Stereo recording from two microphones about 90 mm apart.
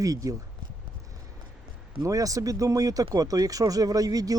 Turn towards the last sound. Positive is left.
turn(degrees=-40)  # may be behind; listen again after turning